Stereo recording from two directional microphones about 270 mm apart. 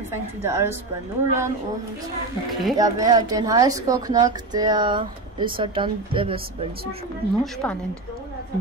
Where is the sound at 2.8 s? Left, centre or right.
Centre.